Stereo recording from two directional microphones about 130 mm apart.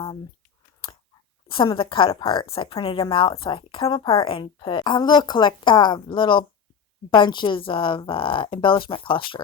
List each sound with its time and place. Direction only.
1.5 s a woman's voice: 40° left (ahead or behind)